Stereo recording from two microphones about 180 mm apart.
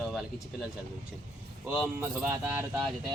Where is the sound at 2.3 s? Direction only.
15° right (ahead or behind).